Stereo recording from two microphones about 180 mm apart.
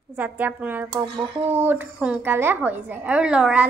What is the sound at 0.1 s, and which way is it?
Speech, 10° right (ahead or behind).